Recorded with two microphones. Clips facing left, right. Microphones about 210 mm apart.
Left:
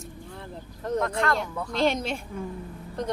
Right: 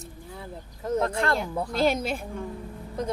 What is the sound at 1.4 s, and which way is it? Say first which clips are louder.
Speech: right 4 dB; 30° right (ahead or behind).